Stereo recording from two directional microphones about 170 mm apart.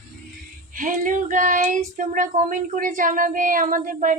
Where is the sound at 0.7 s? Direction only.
50° right (ahead or behind).